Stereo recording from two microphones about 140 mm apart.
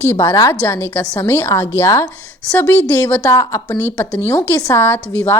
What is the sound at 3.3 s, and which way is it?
A woman's voice, 25° left (ahead or behind).